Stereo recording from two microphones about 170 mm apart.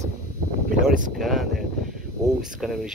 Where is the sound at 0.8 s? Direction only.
50° right (ahead or behind).